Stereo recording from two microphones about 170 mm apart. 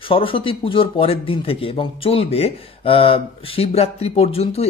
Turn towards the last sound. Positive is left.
turn(degrees=35)  # may be behind; listen again after turning